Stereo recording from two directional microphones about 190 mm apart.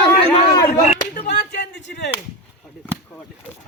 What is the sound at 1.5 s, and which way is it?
Speech, 65° left (ahead or behind).